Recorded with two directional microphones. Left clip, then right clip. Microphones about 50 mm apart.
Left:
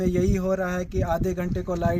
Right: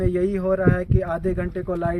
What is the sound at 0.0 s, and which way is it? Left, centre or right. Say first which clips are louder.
Speech: right 3 dB; left.